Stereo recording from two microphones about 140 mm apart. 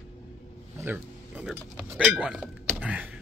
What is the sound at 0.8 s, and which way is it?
Speech, 10° right (ahead or behind).